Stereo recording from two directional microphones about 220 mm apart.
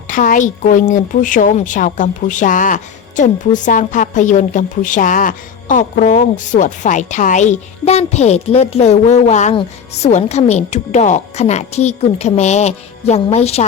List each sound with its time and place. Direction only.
0.1 s a woman's voice: 35° left (ahead or behind)